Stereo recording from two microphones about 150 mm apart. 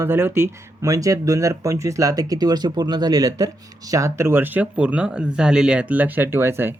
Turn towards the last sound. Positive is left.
turn(degrees=-15)  # may be behind; listen again after turning